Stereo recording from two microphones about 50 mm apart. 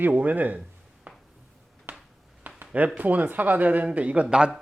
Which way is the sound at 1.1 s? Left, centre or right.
Right.